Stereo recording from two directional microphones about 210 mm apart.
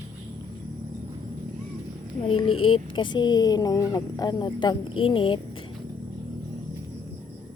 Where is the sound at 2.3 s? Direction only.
25° left (ahead or behind).